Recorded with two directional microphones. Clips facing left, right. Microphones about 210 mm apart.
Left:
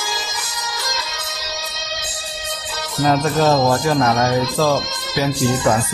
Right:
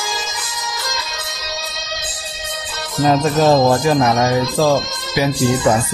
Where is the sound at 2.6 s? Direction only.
20° right (ahead or behind).